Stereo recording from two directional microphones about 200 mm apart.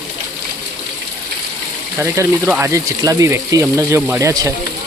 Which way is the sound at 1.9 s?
15° right (ahead or behind).